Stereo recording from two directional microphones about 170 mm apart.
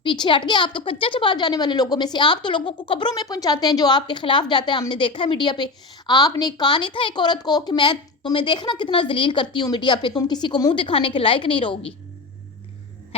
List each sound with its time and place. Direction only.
0.0 s a woman's voice: 30° left (ahead or behind)